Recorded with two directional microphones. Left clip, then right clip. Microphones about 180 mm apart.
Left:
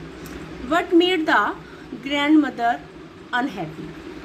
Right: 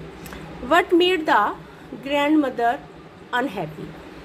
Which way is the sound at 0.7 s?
30° right (ahead or behind).